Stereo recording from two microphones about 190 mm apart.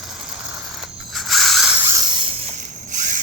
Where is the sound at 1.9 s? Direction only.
25° right (ahead or behind).